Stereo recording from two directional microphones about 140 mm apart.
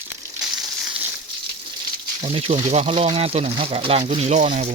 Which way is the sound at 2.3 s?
45° right (ahead or behind).